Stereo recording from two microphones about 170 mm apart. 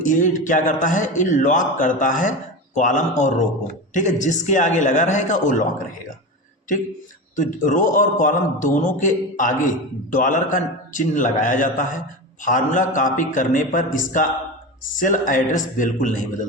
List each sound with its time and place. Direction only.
0.0 s a man's voice: 50° left (ahead or behind)
7.3 s a man's voice: 50° left (ahead or behind)